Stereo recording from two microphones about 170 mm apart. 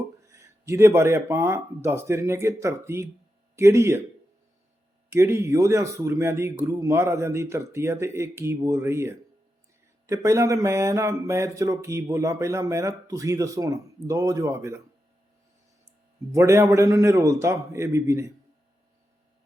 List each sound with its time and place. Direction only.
0.3 s speech: 15° right (ahead or behind)
5.1 s speech: 15° right (ahead or behind)
16.3 s speech: 15° right (ahead or behind)